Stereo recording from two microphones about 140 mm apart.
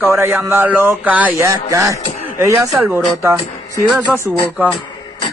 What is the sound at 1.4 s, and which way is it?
Music, 20° right (ahead or behind).